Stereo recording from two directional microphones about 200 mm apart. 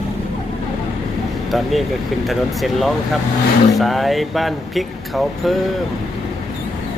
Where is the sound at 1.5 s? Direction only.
Centre (ahead or behind).